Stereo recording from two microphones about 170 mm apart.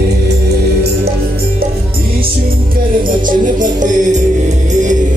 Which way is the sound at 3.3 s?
50° right (ahead or behind).